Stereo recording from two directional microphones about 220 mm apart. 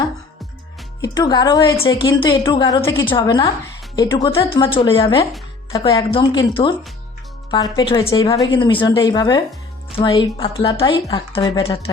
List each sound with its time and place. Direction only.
1.0 s a woman's voice: 15° left (ahead or behind)